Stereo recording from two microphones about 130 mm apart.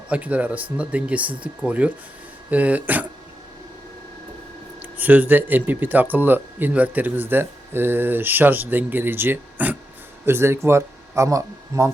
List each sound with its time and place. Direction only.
0.1 s speech: 10° right (ahead or behind)
4.8 s speech: 15° right (ahead or behind)